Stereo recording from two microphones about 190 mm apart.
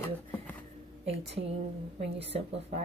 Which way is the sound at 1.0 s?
35° right (ahead or behind).